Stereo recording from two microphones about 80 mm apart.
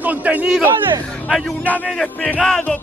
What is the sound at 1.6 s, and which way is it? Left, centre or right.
Speech, left.